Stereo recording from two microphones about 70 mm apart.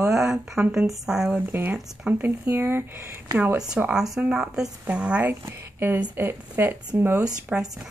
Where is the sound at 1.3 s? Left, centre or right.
Right.